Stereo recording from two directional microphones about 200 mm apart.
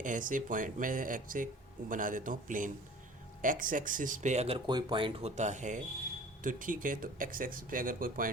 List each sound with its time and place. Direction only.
0.0 s speech: 40° right (ahead or behind)